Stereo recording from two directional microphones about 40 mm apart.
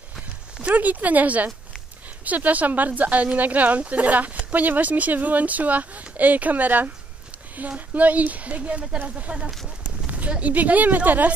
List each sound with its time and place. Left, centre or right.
0.6 s a woman's voice: right